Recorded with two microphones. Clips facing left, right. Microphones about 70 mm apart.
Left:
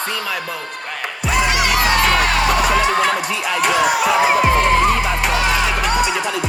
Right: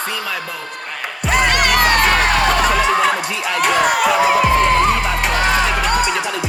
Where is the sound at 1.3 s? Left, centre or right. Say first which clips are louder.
Right 2 dB; right.